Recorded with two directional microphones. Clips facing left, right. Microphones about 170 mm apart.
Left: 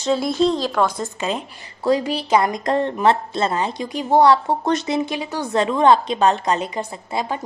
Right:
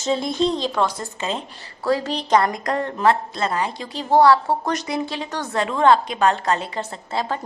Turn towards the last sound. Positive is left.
turn(degrees=15)  # may be behind; listen again after turning